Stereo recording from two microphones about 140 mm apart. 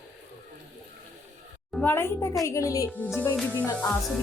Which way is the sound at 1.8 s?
15° left (ahead or behind).